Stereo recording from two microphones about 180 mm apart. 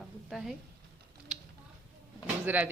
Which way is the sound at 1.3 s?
5° right (ahead or behind).